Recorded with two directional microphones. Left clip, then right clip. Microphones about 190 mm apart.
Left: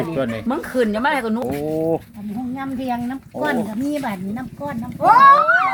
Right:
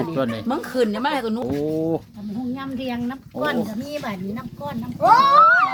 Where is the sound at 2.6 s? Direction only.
25° right (ahead or behind).